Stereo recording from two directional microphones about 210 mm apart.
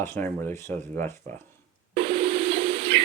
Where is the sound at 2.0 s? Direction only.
25° right (ahead or behind).